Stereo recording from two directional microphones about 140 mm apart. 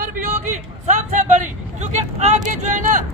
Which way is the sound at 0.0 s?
75° right (ahead or behind).